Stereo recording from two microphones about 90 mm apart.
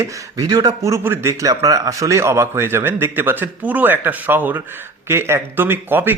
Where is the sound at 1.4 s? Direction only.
40° right (ahead or behind).